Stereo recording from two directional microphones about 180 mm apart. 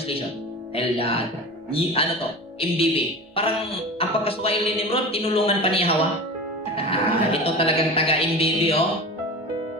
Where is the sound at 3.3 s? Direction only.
30° left (ahead or behind).